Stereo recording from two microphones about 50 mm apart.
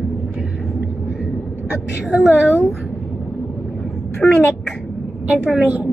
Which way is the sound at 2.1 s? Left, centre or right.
Right.